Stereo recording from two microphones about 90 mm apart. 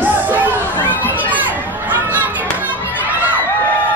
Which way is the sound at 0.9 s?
20° left (ahead or behind).